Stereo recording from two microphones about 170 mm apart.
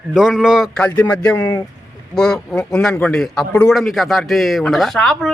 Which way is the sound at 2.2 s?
5° left (ahead or behind).